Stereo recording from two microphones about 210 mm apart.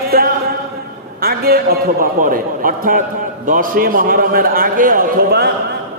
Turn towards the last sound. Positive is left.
turn(degrees=-45)  # may be behind; listen again after turning